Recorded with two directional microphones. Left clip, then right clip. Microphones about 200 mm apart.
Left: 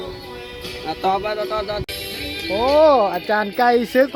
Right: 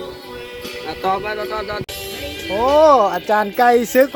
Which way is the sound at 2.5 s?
Centre (ahead or behind).